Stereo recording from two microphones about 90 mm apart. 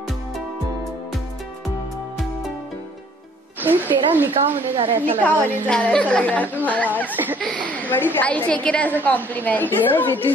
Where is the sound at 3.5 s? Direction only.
20° right (ahead or behind).